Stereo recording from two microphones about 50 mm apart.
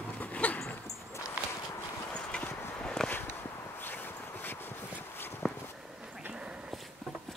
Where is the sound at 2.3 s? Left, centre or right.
Left.